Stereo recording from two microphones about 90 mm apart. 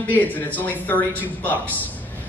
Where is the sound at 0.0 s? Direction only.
20° left (ahead or behind).